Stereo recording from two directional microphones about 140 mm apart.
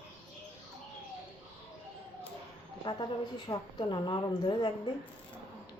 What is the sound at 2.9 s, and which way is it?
A woman's voice, 35° left (ahead or behind).